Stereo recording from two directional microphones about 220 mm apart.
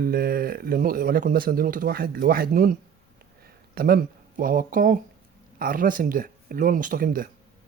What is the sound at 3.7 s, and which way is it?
Speech, 40° right (ahead or behind).